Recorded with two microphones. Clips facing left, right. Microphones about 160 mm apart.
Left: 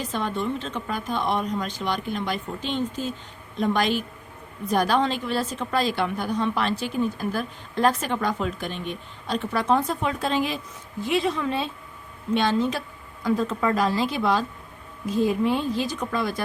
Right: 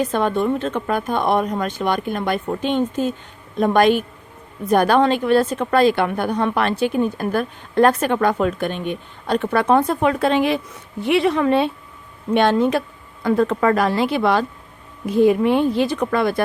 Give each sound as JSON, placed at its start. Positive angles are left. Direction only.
{"t": 0.0, "sound": "a woman's voice", "side_deg": -55}